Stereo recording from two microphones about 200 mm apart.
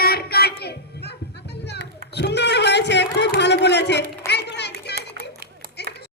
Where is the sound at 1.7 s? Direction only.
55° left (ahead or behind).